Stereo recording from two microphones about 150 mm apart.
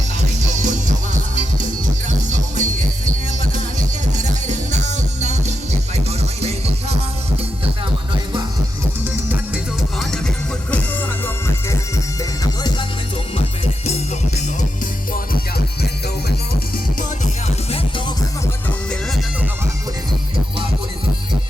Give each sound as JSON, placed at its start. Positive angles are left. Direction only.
{"t": 0.5, "sound": "music", "side_deg": -55}
{"t": 4.2, "sound": "music", "side_deg": -55}
{"t": 13.8, "sound": "music", "side_deg": 45}